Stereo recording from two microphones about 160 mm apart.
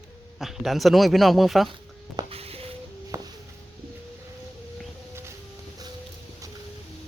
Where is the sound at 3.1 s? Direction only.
20° right (ahead or behind).